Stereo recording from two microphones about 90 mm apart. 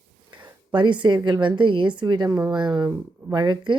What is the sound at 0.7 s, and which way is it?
A woman's voice, 60° right (ahead or behind).